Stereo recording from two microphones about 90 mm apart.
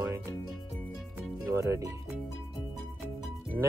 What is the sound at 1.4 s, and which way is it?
Speech, 30° right (ahead or behind).